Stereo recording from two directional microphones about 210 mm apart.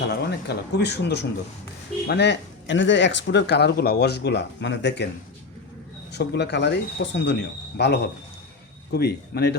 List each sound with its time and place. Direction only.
0.1 s speech: 55° left (ahead or behind)
6.1 s speech: 55° left (ahead or behind)